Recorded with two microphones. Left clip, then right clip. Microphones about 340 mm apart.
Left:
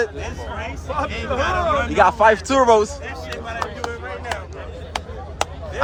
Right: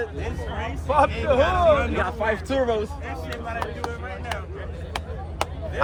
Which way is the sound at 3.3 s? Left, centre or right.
Left.